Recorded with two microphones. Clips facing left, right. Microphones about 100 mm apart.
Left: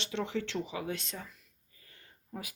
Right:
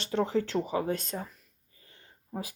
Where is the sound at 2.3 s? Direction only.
30° right (ahead or behind).